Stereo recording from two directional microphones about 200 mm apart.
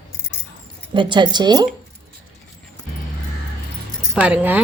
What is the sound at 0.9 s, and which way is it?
Speech, 25° right (ahead or behind).